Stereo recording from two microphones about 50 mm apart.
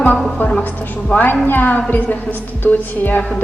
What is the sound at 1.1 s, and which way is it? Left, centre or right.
A woman's voice, left.